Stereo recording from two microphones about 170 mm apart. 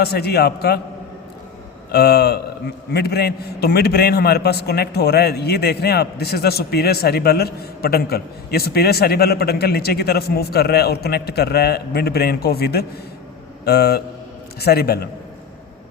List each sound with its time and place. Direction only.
0.0 s a man's voice: 70° left (ahead or behind)
1.9 s a man's voice: 65° left (ahead or behind)